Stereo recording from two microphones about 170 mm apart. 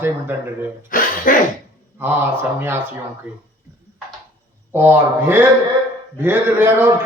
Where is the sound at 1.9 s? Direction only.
10° right (ahead or behind).